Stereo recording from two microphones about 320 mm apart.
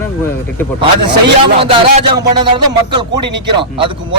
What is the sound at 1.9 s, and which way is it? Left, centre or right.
A man's voice, centre.